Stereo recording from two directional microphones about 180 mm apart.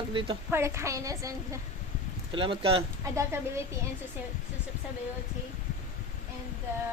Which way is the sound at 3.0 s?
15° right (ahead or behind).